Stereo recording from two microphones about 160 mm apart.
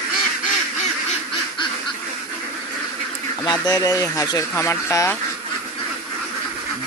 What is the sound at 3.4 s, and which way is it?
Speech, 25° left (ahead or behind).